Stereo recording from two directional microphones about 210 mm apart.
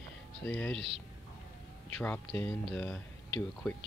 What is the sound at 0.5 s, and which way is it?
Speech, 5° left (ahead or behind).